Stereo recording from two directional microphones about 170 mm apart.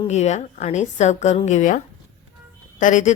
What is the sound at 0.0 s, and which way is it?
A woman's voice, 40° left (ahead or behind).